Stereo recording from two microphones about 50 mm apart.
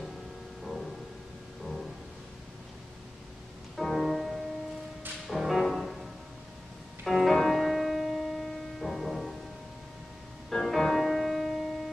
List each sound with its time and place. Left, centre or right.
0.7 s music: centre
3.7 s music: centre
7.1 s music: centre
10.5 s music: centre